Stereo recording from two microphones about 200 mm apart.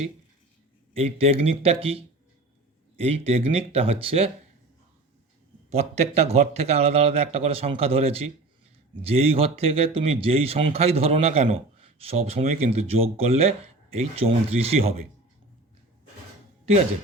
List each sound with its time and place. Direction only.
0.9 s speech: 30° right (ahead or behind)
3.3 s speech: 30° right (ahead or behind)
5.7 s a man's voice: 30° right (ahead or behind)